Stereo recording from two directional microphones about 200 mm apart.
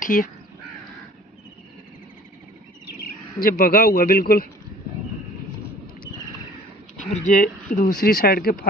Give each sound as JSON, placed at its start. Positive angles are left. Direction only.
{"t": 0.0, "sound": "speech", "side_deg": 45}
{"t": 3.3, "sound": "speech", "side_deg": 45}
{"t": 7.0, "sound": "speech", "side_deg": 40}